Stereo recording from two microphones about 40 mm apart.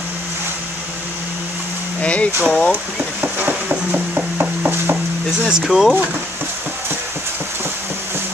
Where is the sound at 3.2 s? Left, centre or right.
Right.